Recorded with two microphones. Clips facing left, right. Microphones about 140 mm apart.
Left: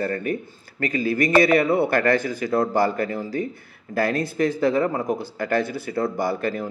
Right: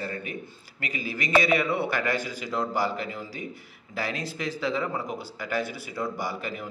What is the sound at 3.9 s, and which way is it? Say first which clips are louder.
A man's voice: left 10 dB; 55° left (ahead or behind).